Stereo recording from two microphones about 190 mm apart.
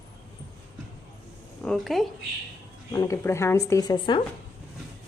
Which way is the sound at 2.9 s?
15° left (ahead or behind).